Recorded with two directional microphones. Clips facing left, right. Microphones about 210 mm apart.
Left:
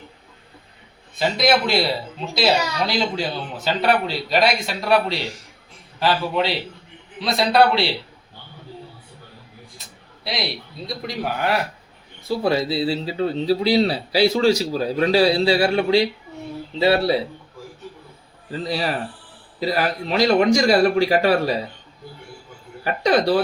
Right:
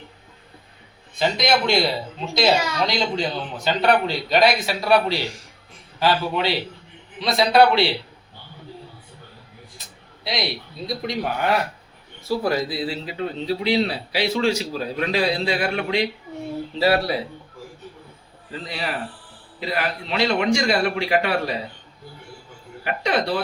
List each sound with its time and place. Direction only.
1.2 s speech: centre (ahead or behind)
10.8 s speech: centre (ahead or behind)
12.4 s a man's voice: 25° left (ahead or behind)
18.6 s a man's voice: 35° left (ahead or behind)
22.8 s a man's voice: 35° left (ahead or behind)